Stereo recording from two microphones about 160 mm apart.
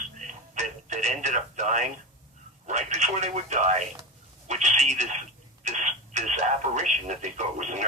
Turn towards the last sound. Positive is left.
turn(degrees=-50)  # may be behind; listen again after turning